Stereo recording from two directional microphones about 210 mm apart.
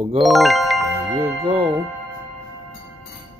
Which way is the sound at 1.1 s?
25° right (ahead or behind).